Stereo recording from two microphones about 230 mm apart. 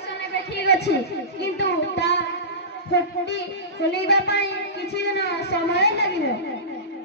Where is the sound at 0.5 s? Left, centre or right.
Left.